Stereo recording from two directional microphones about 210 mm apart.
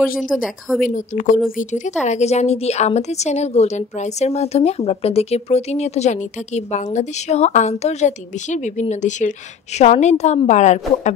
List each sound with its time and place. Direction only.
0.2 s speech: centre (ahead or behind)
0.8 s a woman's voice: 35° left (ahead or behind)